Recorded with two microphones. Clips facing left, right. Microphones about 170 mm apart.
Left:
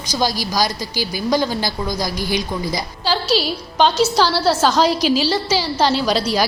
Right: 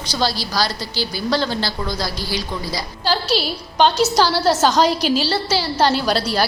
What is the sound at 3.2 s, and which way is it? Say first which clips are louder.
Speech: left 2 dB; 40° left (ahead or behind).